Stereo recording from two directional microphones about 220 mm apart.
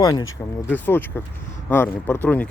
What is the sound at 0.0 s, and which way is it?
Speech, 15° left (ahead or behind).